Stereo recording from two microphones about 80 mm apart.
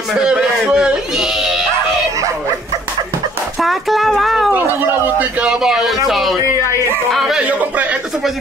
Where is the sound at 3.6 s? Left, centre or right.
Centre.